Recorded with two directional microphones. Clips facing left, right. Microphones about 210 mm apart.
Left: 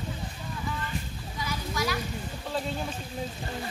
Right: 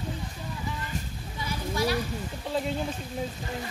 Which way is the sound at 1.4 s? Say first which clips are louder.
Right 3 dB; 30° right (ahead or behind).